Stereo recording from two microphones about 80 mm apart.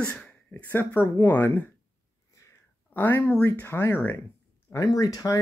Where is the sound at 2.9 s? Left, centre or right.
Left.